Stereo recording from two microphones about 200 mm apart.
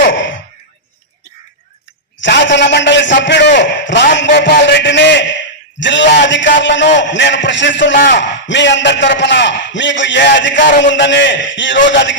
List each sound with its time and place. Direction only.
0.0 s gasp: 70° left (ahead or behind)
2.2 s a man's voice: 65° left (ahead or behind)